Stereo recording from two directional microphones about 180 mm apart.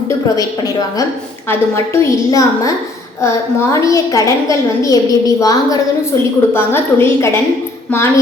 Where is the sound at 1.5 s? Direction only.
15° left (ahead or behind).